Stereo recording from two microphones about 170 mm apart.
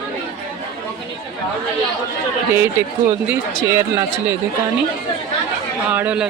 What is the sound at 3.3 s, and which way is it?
Speech, 20° right (ahead or behind).